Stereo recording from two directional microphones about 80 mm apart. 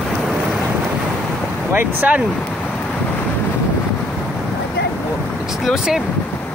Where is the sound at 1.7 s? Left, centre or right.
Right.